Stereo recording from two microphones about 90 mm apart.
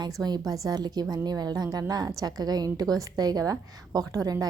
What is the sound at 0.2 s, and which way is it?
A woman's voice, 50° right (ahead or behind).